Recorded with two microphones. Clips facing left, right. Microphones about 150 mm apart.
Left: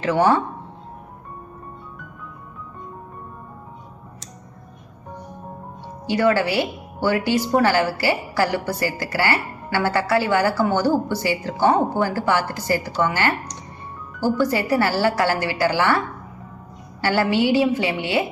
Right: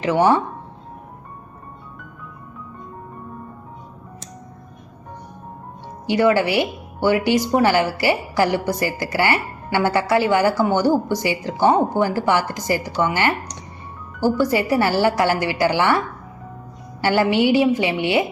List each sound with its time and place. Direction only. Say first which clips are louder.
0.0 s a woman's voice: right 1 dB; 20° right (ahead or behind)
6.1 s a woman's voice: right 2 dB; 20° right (ahead or behind)
14.4 s a woman's voice: even; 15° right (ahead or behind)
17.0 s a woman's voice: right 2 dB; 20° right (ahead or behind)